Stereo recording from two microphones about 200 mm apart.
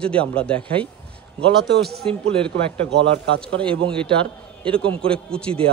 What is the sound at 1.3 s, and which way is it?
Speech, 55° right (ahead or behind).